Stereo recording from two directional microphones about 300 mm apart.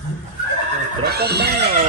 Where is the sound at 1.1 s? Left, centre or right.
Right.